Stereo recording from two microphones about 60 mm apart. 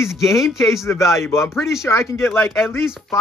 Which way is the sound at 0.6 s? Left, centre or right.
Left.